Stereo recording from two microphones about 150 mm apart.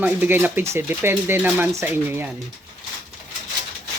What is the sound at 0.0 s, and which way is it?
Speech, 10° right (ahead or behind).